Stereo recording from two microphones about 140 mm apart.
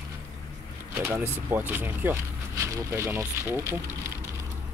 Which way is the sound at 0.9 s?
20° right (ahead or behind).